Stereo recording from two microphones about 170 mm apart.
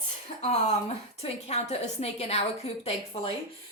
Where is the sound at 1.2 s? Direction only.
40° left (ahead or behind).